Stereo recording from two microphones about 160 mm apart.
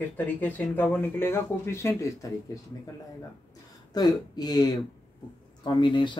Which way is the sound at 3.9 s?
25° left (ahead or behind).